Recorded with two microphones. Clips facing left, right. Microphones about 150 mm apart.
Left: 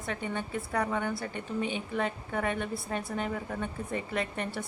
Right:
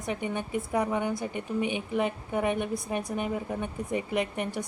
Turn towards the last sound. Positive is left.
turn(degrees=-15)  # may be behind; listen again after turning